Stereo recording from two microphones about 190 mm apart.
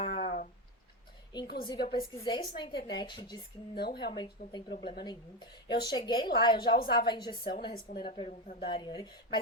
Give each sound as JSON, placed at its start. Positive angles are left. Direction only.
{"t": 0.0, "sound": "a sound", "side_deg": 35}
{"t": 1.6, "sound": "a woman's voice", "side_deg": 25}
{"t": 3.8, "sound": "speech", "side_deg": 55}
{"t": 4.8, "sound": "a woman's voice", "side_deg": 25}
{"t": 7.7, "sound": "a woman's voice", "side_deg": 50}
{"t": 8.0, "sound": "a woman's voice", "side_deg": 30}